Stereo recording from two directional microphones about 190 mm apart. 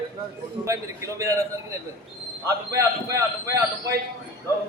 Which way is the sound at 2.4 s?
15° right (ahead or behind).